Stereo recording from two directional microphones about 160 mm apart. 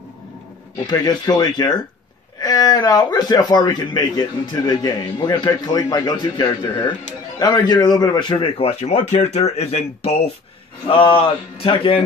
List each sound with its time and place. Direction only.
0.8 s a man's voice: 25° left (ahead or behind)